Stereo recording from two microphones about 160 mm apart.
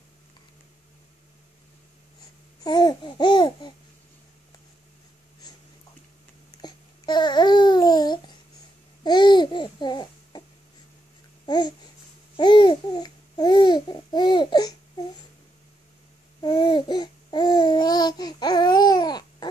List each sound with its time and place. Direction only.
2.6 s babbling: 25° left (ahead or behind)
6.6 s babbling: 25° left (ahead or behind)
11.4 s babbling: 25° left (ahead or behind)
16.3 s babbling: 30° left (ahead or behind)